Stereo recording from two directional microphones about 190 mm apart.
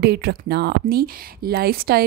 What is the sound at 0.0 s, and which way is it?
Speech, 60° right (ahead or behind).